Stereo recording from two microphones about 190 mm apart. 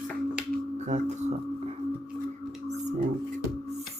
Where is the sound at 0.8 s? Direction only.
40° right (ahead or behind).